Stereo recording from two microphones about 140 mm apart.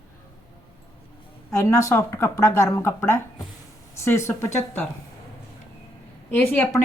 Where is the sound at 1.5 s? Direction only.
25° left (ahead or behind).